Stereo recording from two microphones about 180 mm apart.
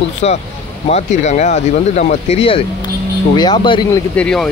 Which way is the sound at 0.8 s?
40° left (ahead or behind).